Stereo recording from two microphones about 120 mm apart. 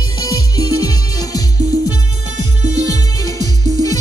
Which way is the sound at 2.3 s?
75° right (ahead or behind).